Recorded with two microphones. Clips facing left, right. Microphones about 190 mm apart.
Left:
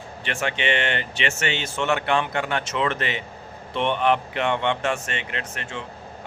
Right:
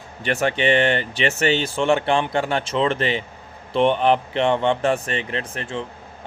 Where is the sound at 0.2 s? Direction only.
40° right (ahead or behind).